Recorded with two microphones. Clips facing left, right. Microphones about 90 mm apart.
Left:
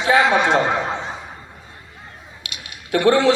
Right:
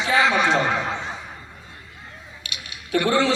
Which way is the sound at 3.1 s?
50° left (ahead or behind).